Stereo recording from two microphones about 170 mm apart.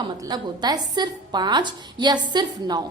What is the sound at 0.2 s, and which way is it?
A woman's voice, 25° right (ahead or behind).